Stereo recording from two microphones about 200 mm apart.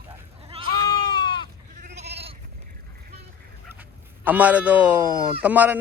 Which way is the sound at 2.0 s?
30° right (ahead or behind).